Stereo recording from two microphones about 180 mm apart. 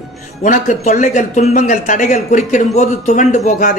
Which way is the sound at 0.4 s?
45° left (ahead or behind).